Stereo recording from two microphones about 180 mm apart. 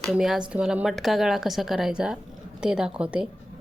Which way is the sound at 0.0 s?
Centre (ahead or behind).